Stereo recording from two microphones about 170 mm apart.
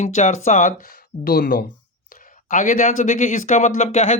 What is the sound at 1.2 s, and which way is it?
Speech, 60° left (ahead or behind).